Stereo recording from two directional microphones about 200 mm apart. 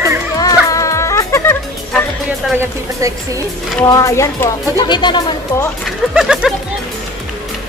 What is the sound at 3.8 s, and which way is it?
Speech, 15° left (ahead or behind).